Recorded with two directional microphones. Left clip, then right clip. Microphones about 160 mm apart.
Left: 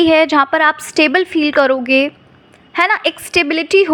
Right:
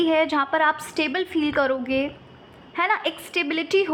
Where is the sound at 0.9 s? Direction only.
35° left (ahead or behind).